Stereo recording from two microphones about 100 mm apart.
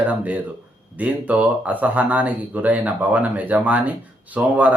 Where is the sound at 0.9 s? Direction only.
15° right (ahead or behind).